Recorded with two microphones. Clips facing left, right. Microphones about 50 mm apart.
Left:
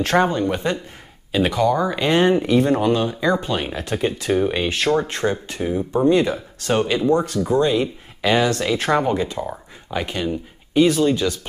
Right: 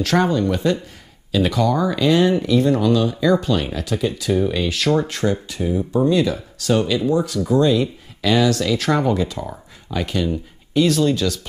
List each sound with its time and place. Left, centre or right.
0.0 s speech: left
2.0 s speech: left